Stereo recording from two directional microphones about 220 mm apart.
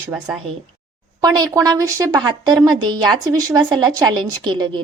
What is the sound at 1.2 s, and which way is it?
A woman's voice, 15° right (ahead or behind).